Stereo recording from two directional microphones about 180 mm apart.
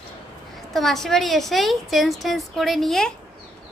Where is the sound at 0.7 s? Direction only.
Centre (ahead or behind).